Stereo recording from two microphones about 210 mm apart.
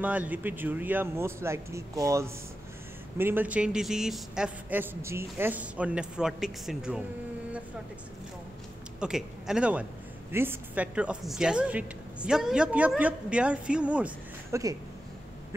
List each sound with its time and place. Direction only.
0.0 s a man's voice: 5° right (ahead or behind)
9.0 s a woman's voice: 5° right (ahead or behind)